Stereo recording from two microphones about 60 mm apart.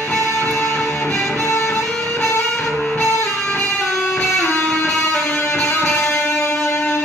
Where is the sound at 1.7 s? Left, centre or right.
Centre.